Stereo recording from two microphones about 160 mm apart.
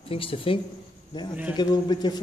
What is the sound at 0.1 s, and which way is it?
A man's voice, 35° left (ahead or behind).